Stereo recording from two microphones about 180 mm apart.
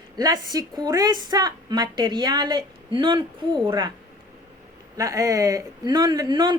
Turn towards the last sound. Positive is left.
turn(degrees=-25)  # may be behind; listen again after turning